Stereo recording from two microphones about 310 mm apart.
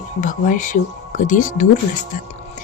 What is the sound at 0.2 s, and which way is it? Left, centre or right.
Speech, left.